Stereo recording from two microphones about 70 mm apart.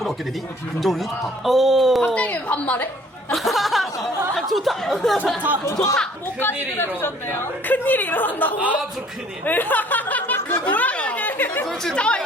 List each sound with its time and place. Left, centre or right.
0.8 s a man's voice: centre
2.1 s a woman's voice: left
3.3 s a man's voice: centre
5.6 s speech: left
6.7 s a woman's voice: left
9.4 s a sound: left
10.8 s chatter: left
11.6 s speech: centre